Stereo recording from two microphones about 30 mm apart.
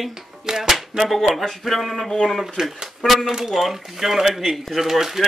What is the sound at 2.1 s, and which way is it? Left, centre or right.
Speech, centre.